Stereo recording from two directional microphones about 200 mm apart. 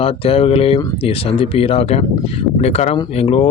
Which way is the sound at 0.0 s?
30° left (ahead or behind).